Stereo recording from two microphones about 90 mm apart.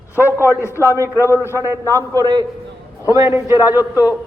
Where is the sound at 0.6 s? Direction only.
30° left (ahead or behind).